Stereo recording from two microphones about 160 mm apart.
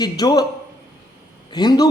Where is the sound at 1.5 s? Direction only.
25° left (ahead or behind).